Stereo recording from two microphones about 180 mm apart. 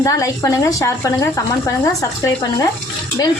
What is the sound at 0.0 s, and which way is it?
Speech, 15° left (ahead or behind).